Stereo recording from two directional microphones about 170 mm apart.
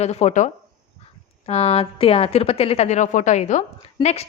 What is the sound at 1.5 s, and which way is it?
A woman's voice, 40° left (ahead or behind).